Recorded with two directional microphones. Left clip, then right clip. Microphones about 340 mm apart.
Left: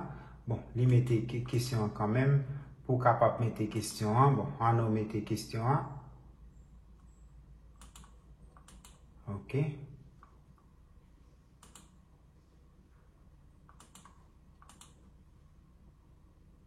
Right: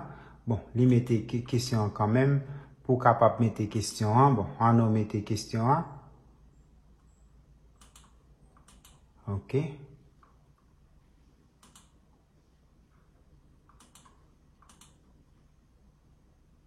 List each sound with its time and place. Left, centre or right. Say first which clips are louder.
0.5 s speech: right 8 dB; right
9.2 s speech: right 5 dB; right